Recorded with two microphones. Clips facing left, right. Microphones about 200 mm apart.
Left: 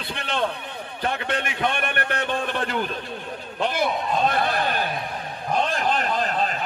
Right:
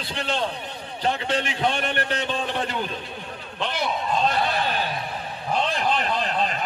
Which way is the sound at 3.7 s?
55° left (ahead or behind).